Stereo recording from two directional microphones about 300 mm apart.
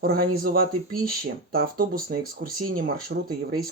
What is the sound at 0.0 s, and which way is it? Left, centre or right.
Speech, right.